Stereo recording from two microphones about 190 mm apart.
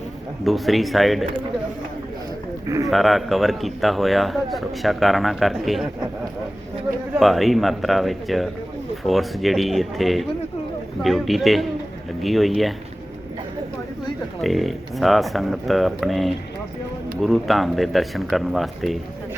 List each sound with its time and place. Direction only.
0.4 s speech: centre (ahead or behind)
2.6 s speech: 15° right (ahead or behind)
2.9 s speech: centre (ahead or behind)
7.2 s speech: centre (ahead or behind)
14.4 s speech: centre (ahead or behind)